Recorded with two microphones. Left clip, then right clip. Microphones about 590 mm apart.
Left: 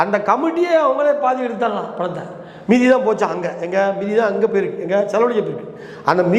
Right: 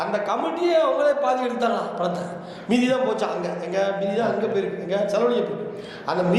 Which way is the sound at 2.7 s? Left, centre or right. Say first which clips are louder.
Left 7 dB; left.